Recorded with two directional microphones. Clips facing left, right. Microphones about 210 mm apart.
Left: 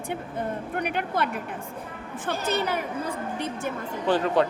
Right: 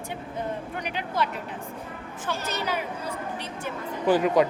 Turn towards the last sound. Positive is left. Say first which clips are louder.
# right 2 dB
turn(degrees=-10)  # may be behind; listen again after turning